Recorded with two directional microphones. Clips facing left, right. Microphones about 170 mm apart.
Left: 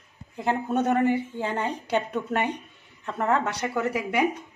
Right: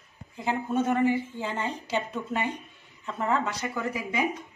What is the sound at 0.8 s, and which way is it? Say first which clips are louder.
A woman's voice: left 1 dB; 60° left (ahead or behind).